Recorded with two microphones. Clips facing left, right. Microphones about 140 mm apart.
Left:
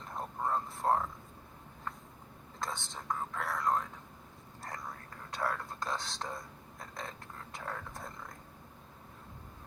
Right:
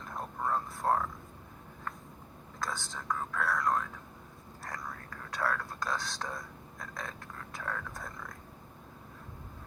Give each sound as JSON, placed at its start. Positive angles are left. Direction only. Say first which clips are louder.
{"t": 0.2, "sound": "a sound", "louder": "right 1 dB", "side_deg": 25}
{"t": 2.6, "sound": "speech", "louder": "right 2 dB", "side_deg": 25}
{"t": 5.3, "sound": "whispering", "louder": "right 2 dB", "side_deg": 25}